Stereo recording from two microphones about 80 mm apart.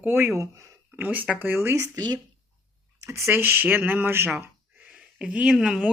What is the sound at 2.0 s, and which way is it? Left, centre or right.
Speech, right.